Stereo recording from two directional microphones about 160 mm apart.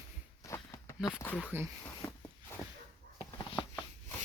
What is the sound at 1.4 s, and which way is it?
Speech, 15° right (ahead or behind).